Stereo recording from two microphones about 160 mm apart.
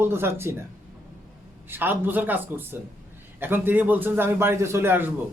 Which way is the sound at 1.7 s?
10° right (ahead or behind).